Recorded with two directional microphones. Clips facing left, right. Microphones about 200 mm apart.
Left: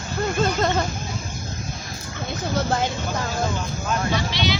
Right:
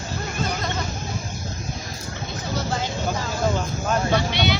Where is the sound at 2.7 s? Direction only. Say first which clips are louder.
Left 2 dB; 55° left (ahead or behind).